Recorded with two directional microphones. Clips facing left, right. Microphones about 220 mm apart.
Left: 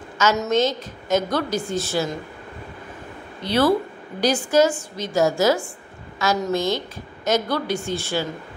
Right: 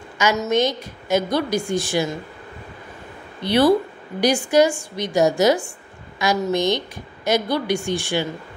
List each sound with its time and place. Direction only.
0.5 s a woman's voice: 15° right (ahead or behind)
3.4 s a woman's voice: 15° right (ahead or behind)